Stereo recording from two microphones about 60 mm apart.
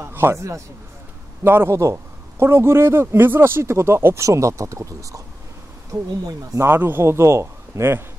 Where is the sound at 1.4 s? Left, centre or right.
Right.